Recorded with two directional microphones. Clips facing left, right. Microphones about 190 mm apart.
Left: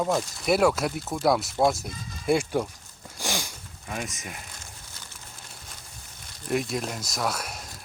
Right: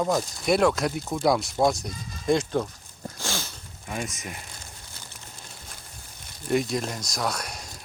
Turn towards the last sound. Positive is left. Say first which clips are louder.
# even
turn(degrees=0)  # may be behind; listen again after turning